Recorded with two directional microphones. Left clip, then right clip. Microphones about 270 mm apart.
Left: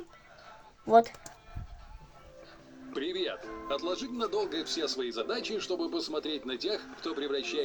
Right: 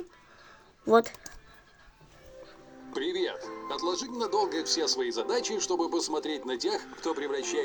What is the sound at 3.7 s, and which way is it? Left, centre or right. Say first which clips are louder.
Speech: right 3 dB; right.